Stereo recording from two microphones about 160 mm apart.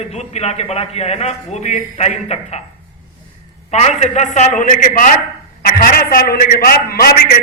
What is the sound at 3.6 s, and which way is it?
A man's voice, 45° left (ahead or behind).